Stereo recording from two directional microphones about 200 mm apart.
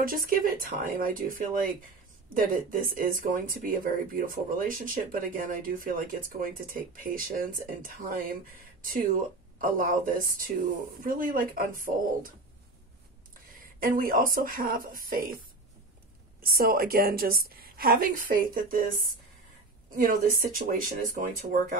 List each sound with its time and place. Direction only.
0.0 s speech: 45° right (ahead or behind)
13.7 s speech: 45° right (ahead or behind)
16.3 s speech: 50° right (ahead or behind)